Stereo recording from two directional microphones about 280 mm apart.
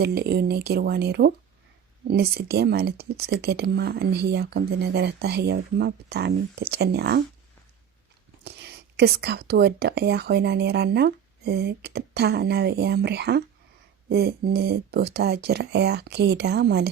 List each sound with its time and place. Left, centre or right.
0.0 s speech: right
8.4 s speech: right